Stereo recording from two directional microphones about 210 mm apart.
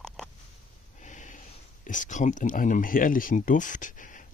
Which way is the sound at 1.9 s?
35° left (ahead or behind).